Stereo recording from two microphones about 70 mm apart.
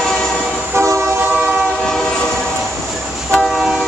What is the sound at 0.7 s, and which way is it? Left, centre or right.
Train, right.